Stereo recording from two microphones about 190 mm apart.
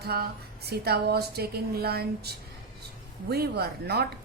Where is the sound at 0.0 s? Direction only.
55° right (ahead or behind).